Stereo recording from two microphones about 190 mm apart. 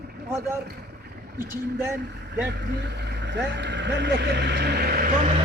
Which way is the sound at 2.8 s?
65° right (ahead or behind).